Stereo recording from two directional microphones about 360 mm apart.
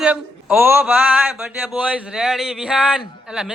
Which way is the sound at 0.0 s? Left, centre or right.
Centre.